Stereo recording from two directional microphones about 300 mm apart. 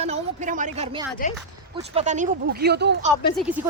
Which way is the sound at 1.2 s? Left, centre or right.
Left.